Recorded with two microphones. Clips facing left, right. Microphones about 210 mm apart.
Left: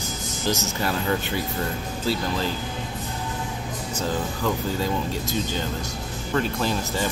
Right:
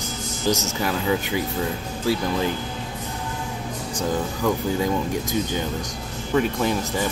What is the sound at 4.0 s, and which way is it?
Speech, 15° right (ahead or behind).